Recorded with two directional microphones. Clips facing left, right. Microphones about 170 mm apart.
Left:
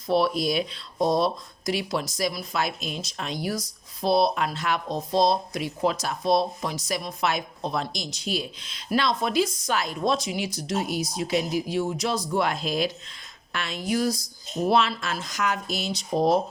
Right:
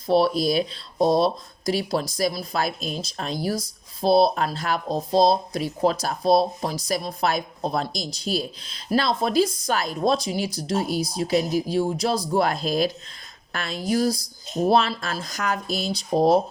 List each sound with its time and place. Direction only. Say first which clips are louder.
0.1 s speech: right 3 dB; 35° right (ahead or behind)